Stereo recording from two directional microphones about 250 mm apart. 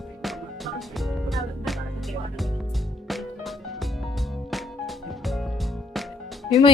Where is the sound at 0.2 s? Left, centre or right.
Centre.